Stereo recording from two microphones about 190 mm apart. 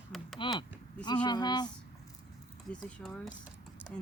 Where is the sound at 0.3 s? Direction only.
25° left (ahead or behind).